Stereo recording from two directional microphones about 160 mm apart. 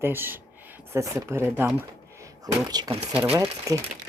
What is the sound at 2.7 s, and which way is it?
Speech, 25° right (ahead or behind).